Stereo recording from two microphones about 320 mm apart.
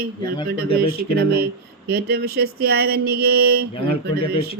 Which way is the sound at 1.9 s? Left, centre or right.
Right.